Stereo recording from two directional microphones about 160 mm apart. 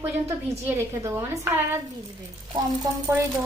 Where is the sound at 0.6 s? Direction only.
15° right (ahead or behind).